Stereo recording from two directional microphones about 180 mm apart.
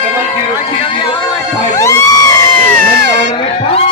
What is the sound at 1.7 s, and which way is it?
Crowd, 15° left (ahead or behind).